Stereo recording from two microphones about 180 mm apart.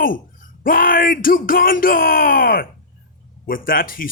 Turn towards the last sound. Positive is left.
turn(degrees=50)  # may be behind; listen again after turning